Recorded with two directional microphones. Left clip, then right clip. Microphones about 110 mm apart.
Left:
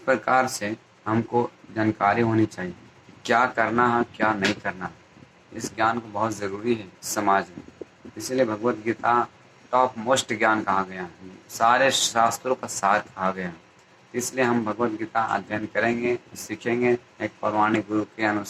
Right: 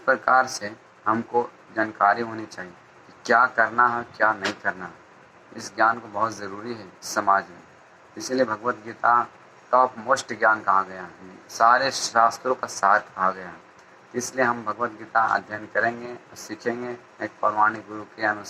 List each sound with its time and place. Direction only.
0.0 s speech: 45° left (ahead or behind)
5.5 s speech: 55° left (ahead or behind)
14.1 s speech: 55° left (ahead or behind)